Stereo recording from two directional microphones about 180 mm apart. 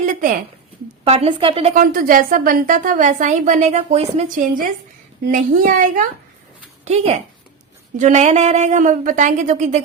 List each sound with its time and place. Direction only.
0.0 s a sound: 50° right (ahead or behind)
1.0 s speech: 35° right (ahead or behind)
5.2 s speech: 50° right (ahead or behind)
6.8 s a woman's voice: 35° right (ahead or behind)